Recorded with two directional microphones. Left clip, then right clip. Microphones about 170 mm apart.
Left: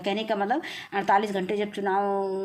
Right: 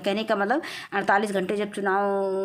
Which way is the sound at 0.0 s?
30° right (ahead or behind).